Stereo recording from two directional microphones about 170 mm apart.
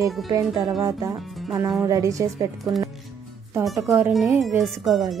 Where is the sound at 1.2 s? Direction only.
Centre (ahead or behind).